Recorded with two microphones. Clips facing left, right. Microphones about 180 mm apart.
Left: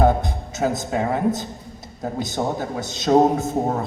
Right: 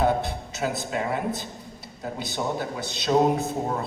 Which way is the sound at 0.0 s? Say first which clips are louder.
Left 5 dB; 45° left (ahead or behind).